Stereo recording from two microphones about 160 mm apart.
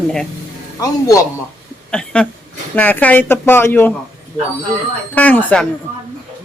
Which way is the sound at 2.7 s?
10° left (ahead or behind).